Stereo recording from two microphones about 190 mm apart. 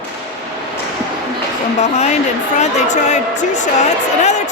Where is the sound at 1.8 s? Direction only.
35° left (ahead or behind).